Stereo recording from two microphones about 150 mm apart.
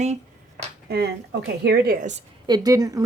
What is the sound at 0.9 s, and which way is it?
Speech, 90° right.